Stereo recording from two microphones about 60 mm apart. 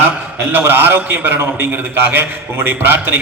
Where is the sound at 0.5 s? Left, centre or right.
Right.